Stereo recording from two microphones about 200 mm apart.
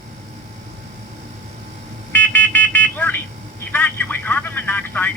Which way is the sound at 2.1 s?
10° left (ahead or behind).